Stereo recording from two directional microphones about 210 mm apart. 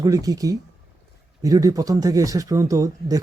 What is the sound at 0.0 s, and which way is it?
Speech, 15° right (ahead or behind).